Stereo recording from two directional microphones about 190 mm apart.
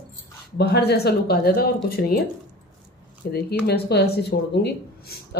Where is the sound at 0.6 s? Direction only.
60° left (ahead or behind).